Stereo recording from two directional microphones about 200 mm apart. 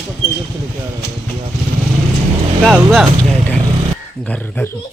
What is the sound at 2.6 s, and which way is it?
Speech, centre (ahead or behind).